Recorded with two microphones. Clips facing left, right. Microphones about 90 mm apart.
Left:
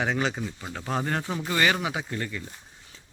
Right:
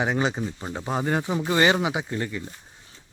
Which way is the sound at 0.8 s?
10° right (ahead or behind).